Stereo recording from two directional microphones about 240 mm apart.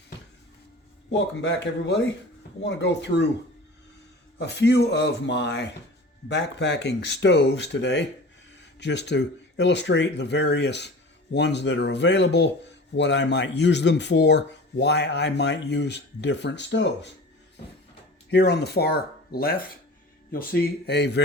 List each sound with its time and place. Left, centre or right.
1.1 s speech: left
4.4 s speech: left
18.3 s speech: left